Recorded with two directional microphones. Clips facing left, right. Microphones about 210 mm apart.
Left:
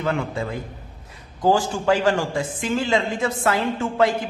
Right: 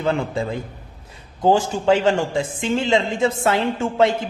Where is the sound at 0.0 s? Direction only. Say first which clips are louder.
Right 3 dB; 25° right (ahead or behind).